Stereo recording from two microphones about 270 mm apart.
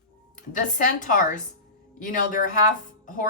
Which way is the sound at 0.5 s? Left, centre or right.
Left.